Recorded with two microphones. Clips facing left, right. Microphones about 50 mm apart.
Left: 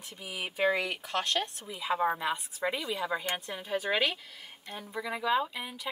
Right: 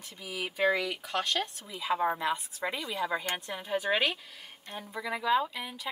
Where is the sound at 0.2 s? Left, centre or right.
Left.